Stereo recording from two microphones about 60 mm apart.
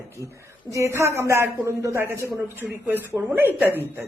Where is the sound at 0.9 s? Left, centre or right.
Right.